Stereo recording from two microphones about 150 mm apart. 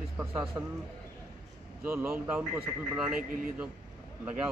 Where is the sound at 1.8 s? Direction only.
15° right (ahead or behind).